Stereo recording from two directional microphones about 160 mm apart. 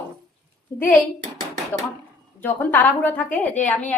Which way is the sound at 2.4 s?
10° left (ahead or behind).